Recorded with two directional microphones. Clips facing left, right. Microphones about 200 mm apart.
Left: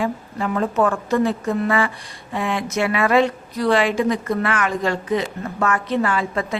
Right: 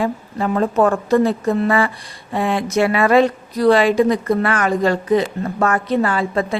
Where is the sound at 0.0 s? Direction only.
35° right (ahead or behind).